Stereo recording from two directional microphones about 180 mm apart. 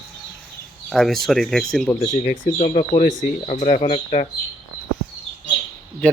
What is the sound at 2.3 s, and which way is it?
Speech, 35° left (ahead or behind).